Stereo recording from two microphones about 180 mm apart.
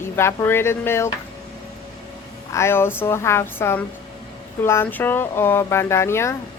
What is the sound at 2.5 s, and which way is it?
Speech, 15° left (ahead or behind).